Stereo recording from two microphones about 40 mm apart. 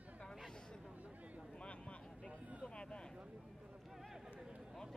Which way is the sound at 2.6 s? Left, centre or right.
Left.